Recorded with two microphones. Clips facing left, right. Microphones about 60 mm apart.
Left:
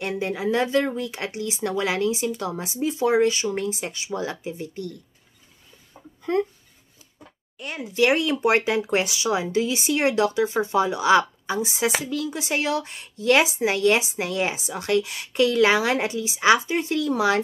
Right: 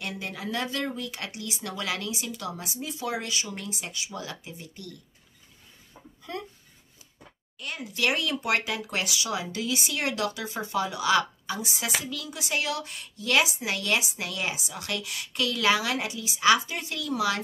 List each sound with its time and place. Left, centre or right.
0.0 s speech: left
6.2 s speech: left
7.5 s speech: left